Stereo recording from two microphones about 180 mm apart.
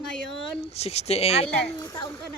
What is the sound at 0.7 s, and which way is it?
Speech, 35° left (ahead or behind).